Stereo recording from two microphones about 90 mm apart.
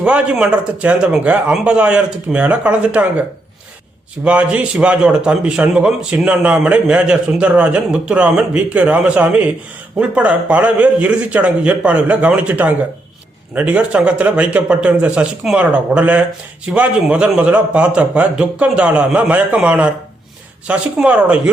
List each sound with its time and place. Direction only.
0.0 s a man's voice: 10° right (ahead or behind)
4.2 s a man's voice: 15° right (ahead or behind)